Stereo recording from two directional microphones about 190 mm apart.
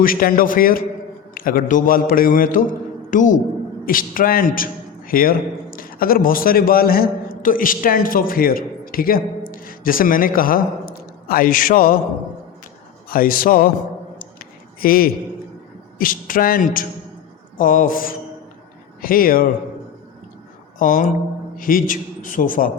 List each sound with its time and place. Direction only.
0.0 s a man's voice: 50° left (ahead or behind)
13.1 s a man's voice: 50° left (ahead or behind)
14.2 s a sound: 50° left (ahead or behind)
16.0 s a man's voice: 45° left (ahead or behind)
20.7 s a man's voice: 45° left (ahead or behind)